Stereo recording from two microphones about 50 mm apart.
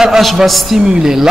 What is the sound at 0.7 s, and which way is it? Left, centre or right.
Speech, centre.